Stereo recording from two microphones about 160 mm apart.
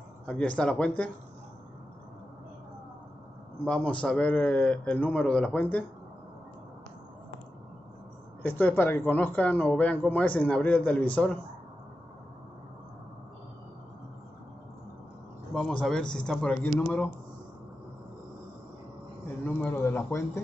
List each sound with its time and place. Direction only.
0.3 s speech: 5° left (ahead or behind)
3.6 s speech: 5° left (ahead or behind)
8.4 s speech: 10° left (ahead or behind)
15.5 s a man's voice: 5° left (ahead or behind)
19.4 s speech: 10° left (ahead or behind)